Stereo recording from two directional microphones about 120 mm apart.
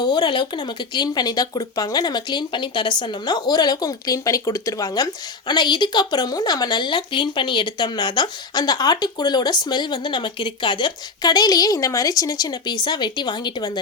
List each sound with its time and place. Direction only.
0.0 s speech: 40° left (ahead or behind)